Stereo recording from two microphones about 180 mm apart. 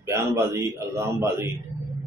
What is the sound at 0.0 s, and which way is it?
A man's voice, 15° right (ahead or behind).